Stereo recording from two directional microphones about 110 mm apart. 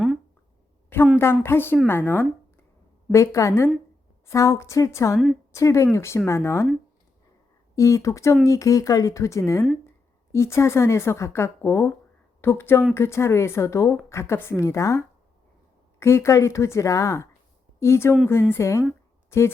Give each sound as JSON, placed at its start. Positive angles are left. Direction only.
{"t": 1.2, "sound": "a woman's voice", "side_deg": 20}
{"t": 7.8, "sound": "a woman's voice", "side_deg": 30}